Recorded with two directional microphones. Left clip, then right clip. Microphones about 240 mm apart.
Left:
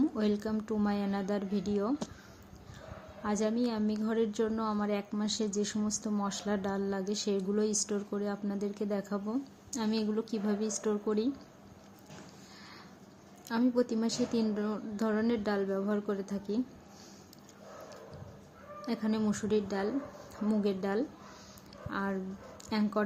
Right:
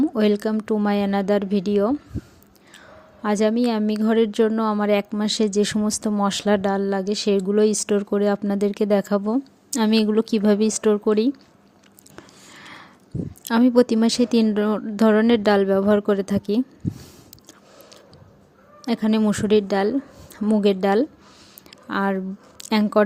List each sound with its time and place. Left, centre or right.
0.0 s a woman's voice: right
3.2 s a woman's voice: right
12.5 s a sound: right
13.4 s a woman's voice: right
18.9 s a woman's voice: right